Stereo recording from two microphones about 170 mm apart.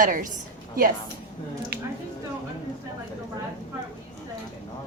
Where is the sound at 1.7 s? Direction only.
70° right (ahead or behind).